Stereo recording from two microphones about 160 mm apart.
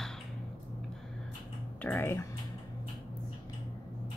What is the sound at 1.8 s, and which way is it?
Speech, 15° left (ahead or behind).